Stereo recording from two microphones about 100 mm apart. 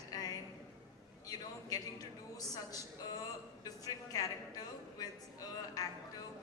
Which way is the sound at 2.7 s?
40° left (ahead or behind).